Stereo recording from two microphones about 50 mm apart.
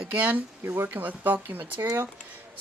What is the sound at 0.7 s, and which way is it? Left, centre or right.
Speech, right.